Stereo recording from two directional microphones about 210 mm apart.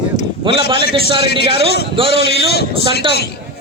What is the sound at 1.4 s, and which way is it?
A man's voice, 50° left (ahead or behind).